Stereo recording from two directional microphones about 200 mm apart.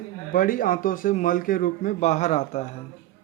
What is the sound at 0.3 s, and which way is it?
A man's voice, 45° left (ahead or behind).